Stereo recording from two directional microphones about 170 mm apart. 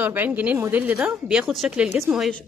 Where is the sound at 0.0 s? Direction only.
10° right (ahead or behind).